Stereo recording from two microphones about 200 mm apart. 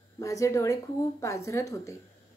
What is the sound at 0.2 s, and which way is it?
A woman's voice, 15° left (ahead or behind).